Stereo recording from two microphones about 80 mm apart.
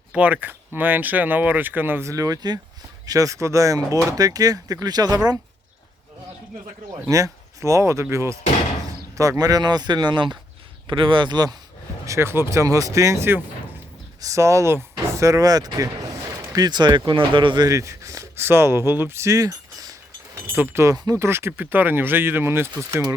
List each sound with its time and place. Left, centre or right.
0.2 s speech: right
2.0 s speech: right
7.1 s speech: right
9.4 s speech: right
10.8 s speech: right
12.0 s speech: right
17.7 s speech: right